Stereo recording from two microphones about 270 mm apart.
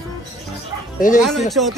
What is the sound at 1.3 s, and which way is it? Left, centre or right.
Speech, centre.